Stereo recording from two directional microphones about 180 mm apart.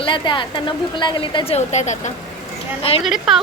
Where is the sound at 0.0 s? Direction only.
25° left (ahead or behind).